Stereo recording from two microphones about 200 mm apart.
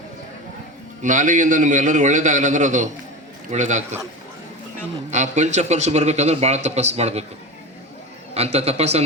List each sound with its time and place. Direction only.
1.0 s a man's voice: 40° right (ahead or behind)
5.1 s a man's voice: 35° right (ahead or behind)
8.3 s a man's voice: 30° right (ahead or behind)